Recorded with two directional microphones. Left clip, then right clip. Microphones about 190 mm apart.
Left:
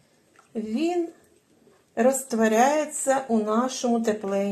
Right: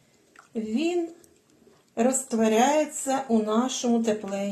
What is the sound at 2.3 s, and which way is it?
Speech, 30° left (ahead or behind).